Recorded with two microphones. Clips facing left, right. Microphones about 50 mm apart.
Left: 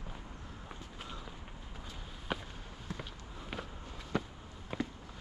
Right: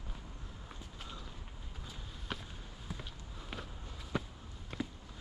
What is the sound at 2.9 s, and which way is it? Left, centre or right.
Walk, centre.